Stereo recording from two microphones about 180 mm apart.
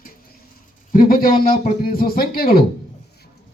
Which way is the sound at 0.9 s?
50° left (ahead or behind).